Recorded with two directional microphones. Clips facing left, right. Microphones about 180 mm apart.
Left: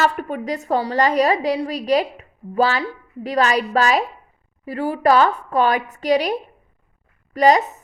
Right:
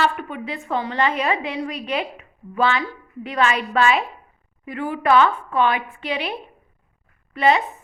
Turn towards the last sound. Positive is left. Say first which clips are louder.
# left 4 dB
turn(degrees=40)  # may be behind; listen again after turning